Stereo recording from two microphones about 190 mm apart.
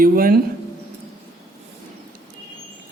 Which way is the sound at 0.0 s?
50° right (ahead or behind).